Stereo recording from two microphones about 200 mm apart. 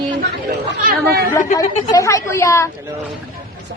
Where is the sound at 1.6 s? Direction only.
15° left (ahead or behind).